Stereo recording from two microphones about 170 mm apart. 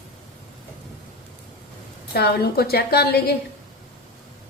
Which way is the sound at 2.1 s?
65° left (ahead or behind).